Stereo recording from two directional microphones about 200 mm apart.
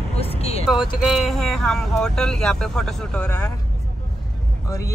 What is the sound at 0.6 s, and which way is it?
Speech, centre (ahead or behind).